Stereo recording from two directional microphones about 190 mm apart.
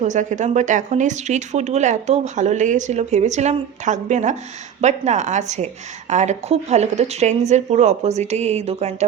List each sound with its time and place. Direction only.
0.0 s speech: 40° right (ahead or behind)